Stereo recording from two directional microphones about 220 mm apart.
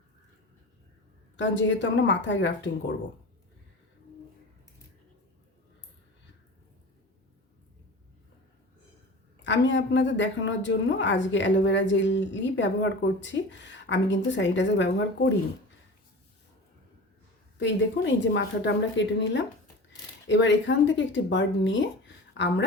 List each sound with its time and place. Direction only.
1.4 s a woman's voice: 55° left (ahead or behind)
9.4 s a woman's voice: 55° left (ahead or behind)
17.6 s a woman's voice: 55° left (ahead or behind)